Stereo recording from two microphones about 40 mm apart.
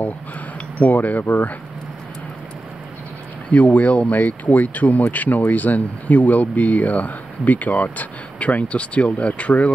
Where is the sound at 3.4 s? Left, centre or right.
Left.